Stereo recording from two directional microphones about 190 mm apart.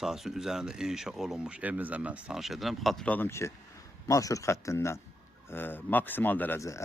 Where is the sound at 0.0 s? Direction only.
Centre (ahead or behind).